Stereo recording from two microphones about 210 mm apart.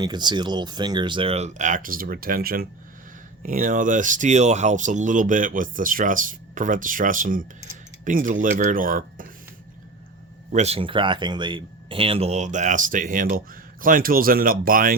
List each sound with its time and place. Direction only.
0.0 s speech: 20° right (ahead or behind); by 9.3 s 40° right (ahead or behind)
10.5 s speech: 30° right (ahead or behind)